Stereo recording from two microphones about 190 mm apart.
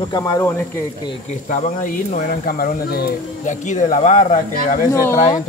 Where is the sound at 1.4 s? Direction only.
40° left (ahead or behind).